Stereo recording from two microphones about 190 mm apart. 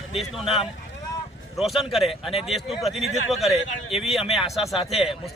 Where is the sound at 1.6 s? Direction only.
Centre (ahead or behind).